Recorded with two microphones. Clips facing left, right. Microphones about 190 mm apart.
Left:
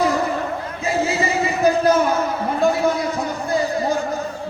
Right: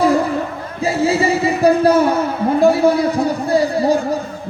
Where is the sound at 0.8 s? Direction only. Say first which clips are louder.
Right 6 dB; 30° right (ahead or behind).